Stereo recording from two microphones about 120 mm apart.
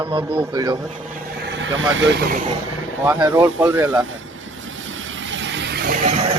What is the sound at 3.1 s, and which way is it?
Speech, 35° right (ahead or behind).